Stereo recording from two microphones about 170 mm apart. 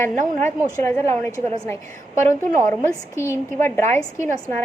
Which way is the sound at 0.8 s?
15° left (ahead or behind).